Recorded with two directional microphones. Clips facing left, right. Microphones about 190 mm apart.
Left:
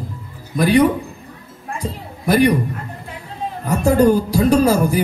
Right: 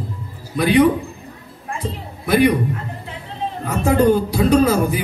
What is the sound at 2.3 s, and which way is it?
Speech, 40° left (ahead or behind).